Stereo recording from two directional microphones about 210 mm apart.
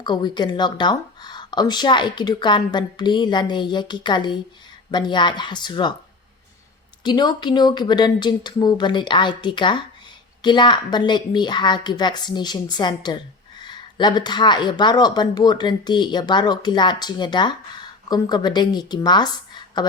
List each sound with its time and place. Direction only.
0.0 s speech: 20° left (ahead or behind)
7.0 s speech: 20° left (ahead or behind)